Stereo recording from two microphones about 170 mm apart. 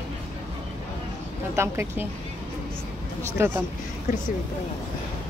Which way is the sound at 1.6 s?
15° right (ahead or behind).